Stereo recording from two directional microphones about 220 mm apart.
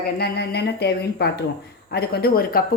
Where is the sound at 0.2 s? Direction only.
50° left (ahead or behind).